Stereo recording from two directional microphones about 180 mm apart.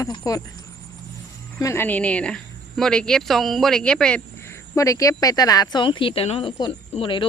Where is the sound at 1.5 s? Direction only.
15° left (ahead or behind).